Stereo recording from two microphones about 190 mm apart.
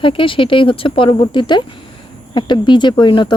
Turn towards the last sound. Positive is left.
turn(degrees=25)  # may be behind; listen again after turning